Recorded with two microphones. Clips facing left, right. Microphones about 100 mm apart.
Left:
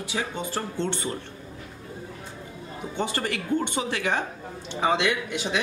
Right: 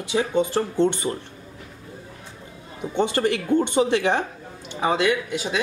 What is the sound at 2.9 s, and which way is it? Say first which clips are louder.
Speech: right 7 dB; 25° right (ahead or behind).